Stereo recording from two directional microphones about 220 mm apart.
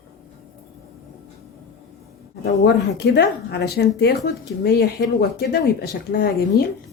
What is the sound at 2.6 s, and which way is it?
A woman's voice, 50° left (ahead or behind).